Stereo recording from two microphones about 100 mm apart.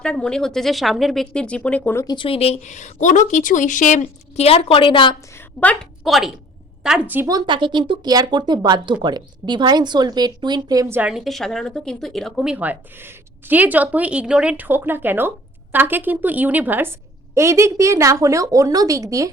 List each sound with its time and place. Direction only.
0.0 s speech: 5° left (ahead or behind)
2.0 s speech: 60° left (ahead or behind); by 2.6 s 80° left
4.4 s a woman's voice: 80° left; by 5.1 s 55° left (ahead or behind)
5.3 s a woman's voice: 20° left (ahead or behind)
6.0 s a woman's voice: centre (ahead or behind)
7.3 s speech: 45° right (ahead or behind)
11.0 s speech: 5° right (ahead or behind)
12.5 s a woman's voice: 15° right (ahead or behind)
17.3 s a woman's voice: 30° right (ahead or behind)